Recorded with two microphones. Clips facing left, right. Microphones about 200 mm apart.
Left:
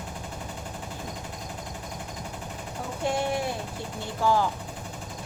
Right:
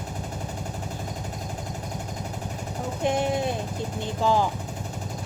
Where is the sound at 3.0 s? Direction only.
20° right (ahead or behind).